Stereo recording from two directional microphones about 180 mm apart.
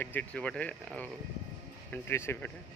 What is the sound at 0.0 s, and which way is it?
Speech, 10° left (ahead or behind).